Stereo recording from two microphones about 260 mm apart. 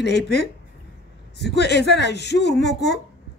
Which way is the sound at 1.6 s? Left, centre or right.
Left.